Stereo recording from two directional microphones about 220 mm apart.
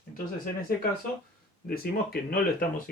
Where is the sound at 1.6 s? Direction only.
45° left (ahead or behind).